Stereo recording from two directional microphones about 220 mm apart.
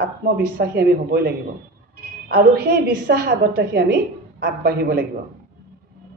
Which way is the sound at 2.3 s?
45° right (ahead or behind).